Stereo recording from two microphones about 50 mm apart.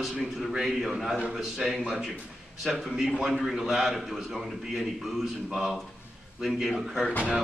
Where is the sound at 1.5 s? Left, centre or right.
Centre.